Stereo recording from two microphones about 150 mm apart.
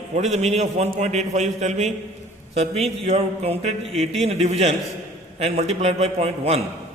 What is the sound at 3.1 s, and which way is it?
A man's voice, 45° right (ahead or behind).